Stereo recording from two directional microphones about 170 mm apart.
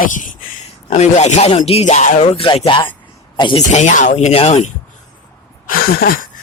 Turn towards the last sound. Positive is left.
turn(degrees=60)  # may be behind; listen again after turning